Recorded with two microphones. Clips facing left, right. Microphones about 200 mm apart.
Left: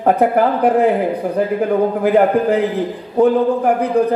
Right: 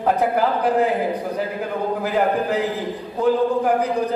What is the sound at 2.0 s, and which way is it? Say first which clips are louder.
Speech: left 6 dB; 55° left (ahead or behind).